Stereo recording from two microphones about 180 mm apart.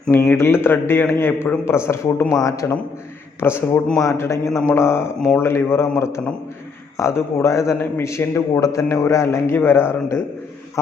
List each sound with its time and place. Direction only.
0.1 s a man's voice: 15° left (ahead or behind)